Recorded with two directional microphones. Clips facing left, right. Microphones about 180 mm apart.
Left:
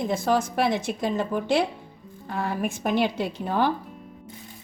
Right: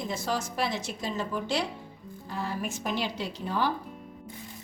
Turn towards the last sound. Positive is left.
turn(degrees=55)  # may be behind; listen again after turning